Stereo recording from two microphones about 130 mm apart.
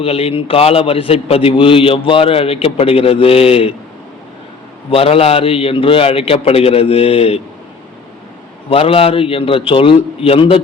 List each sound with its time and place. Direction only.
0.0 s a man's voice: 50° left (ahead or behind)
4.9 s a man's voice: 50° left (ahead or behind)
8.7 s a man's voice: 45° left (ahead or behind)